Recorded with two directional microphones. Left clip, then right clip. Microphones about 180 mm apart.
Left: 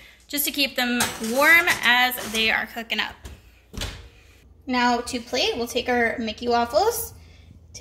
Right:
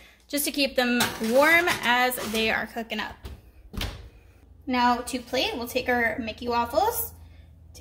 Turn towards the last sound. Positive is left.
turn(degrees=35)  # may be behind; listen again after turning